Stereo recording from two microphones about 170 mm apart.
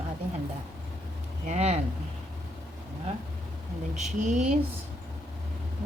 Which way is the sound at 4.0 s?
45° right (ahead or behind).